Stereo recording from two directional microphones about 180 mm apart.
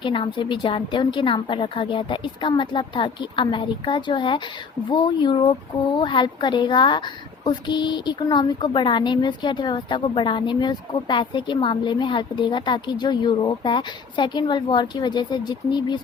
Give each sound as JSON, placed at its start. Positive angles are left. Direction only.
{"t": 0.0, "sound": "a woman's voice", "side_deg": 30}